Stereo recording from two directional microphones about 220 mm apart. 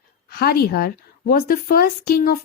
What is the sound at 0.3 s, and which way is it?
A woman's voice, 45° left (ahead or behind).